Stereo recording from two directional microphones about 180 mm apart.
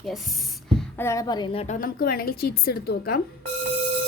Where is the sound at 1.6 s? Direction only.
45° left (ahead or behind).